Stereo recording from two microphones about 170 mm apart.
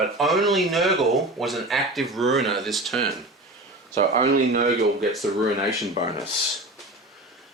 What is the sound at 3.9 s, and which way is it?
Speech, 45° right (ahead or behind).